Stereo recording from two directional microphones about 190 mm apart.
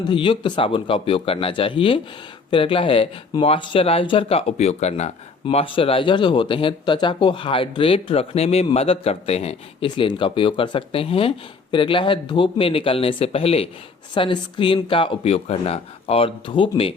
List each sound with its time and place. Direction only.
0.1 s speech: 25° left (ahead or behind)